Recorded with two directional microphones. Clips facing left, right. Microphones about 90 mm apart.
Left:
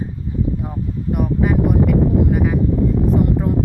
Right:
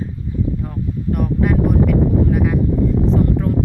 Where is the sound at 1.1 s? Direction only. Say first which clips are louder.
Even; 5° left (ahead or behind).